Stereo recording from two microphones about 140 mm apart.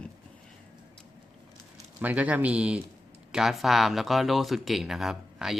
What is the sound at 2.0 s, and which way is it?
Speech, 10° right (ahead or behind).